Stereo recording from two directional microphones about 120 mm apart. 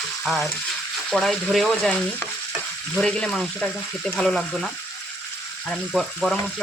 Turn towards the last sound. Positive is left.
turn(degrees=0)  # may be behind; listen again after turning